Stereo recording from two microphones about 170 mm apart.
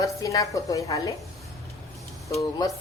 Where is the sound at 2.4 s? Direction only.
20° left (ahead or behind).